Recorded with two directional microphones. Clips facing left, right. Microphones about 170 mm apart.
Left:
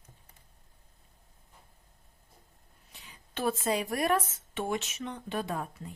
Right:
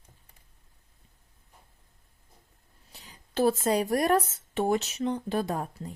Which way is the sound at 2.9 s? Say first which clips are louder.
Right 10 dB; 35° right (ahead or behind).